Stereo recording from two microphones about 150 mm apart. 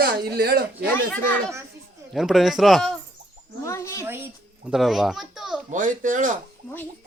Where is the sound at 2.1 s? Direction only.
Centre (ahead or behind).